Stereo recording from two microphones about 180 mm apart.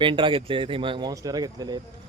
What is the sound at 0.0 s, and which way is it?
Speech, 30° right (ahead or behind).